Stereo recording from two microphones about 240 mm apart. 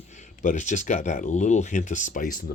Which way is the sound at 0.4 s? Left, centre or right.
Left.